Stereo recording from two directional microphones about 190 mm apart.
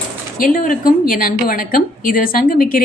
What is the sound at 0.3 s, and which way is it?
Speech, 45° left (ahead or behind).